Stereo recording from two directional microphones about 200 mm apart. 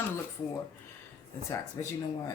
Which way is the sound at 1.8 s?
20° left (ahead or behind).